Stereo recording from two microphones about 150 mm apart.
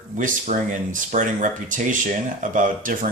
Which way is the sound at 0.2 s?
60° right (ahead or behind).